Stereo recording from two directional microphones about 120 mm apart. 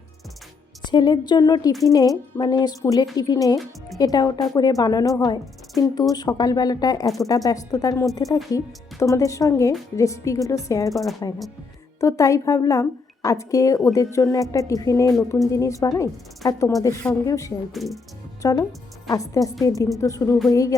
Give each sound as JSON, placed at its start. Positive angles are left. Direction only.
{"t": 0.8, "sound": "a woman's voice", "side_deg": 35}
{"t": 10.9, "sound": "speech", "side_deg": 0}
{"t": 11.9, "sound": "a woman's voice", "side_deg": 25}
{"t": 17.7, "sound": "speech", "side_deg": 0}
{"t": 18.4, "sound": "a woman's voice", "side_deg": 30}